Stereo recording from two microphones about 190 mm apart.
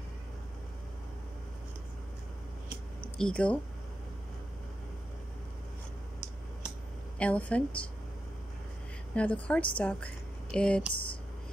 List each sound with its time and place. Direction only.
3.0 s a sound: 5° left (ahead or behind)
7.2 s a woman's voice: 5° left (ahead or behind)
9.1 s a woman's voice: 5° left (ahead or behind)
10.9 s speech: 25° left (ahead or behind)